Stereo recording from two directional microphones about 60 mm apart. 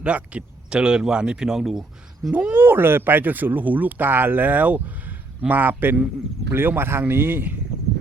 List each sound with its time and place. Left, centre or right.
0.0 s speech: right
2.3 s speech: right